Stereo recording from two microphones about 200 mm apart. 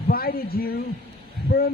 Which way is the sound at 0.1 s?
50° left (ahead or behind).